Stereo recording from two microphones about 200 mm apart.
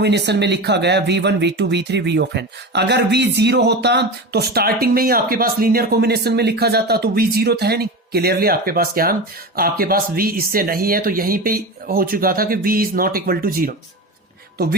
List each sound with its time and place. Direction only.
0.0 s speech: 60° right (ahead or behind)